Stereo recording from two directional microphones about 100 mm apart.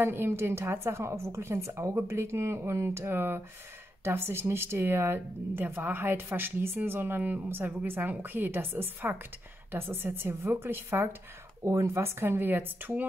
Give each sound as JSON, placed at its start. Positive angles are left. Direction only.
{"t": 0.0, "sound": "speech", "side_deg": -25}